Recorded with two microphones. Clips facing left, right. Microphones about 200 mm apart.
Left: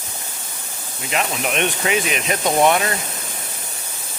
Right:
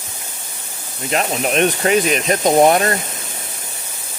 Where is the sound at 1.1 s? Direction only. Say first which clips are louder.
Right 4 dB; 40° right (ahead or behind).